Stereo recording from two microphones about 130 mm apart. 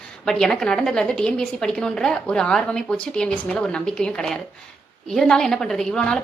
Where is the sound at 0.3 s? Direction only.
5° left (ahead or behind).